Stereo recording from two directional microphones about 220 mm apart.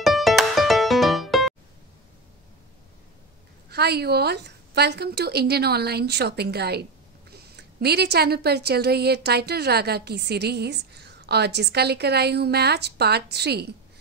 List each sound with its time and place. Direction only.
0.0 s music: centre (ahead or behind)
3.7 s a woman's voice: 45° right (ahead or behind)